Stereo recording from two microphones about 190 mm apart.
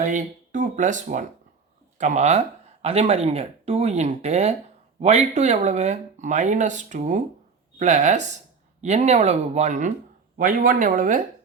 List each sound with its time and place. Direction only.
0.0 s speech: 40° right (ahead or behind)